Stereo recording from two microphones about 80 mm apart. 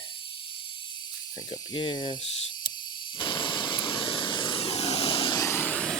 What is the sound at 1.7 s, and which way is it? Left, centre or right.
Speech, left.